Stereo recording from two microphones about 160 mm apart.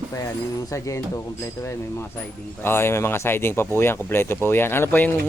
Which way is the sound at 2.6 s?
15° left (ahead or behind).